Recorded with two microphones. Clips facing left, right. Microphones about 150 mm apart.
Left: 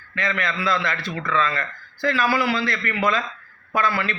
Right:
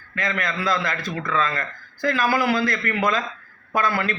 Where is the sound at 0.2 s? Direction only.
45° right (ahead or behind).